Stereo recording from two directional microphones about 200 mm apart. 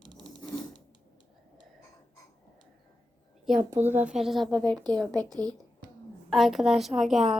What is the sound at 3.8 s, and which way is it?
Speech, 10° right (ahead or behind).